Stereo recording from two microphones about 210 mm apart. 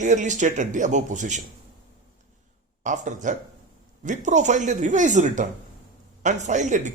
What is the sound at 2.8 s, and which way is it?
Speech, 35° right (ahead or behind).